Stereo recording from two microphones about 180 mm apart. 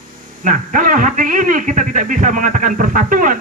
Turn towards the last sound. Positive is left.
turn(degrees=-45)  # may be behind; listen again after turning